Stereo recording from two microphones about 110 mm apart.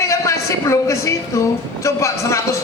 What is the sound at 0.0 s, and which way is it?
A woman's voice, 25° left (ahead or behind).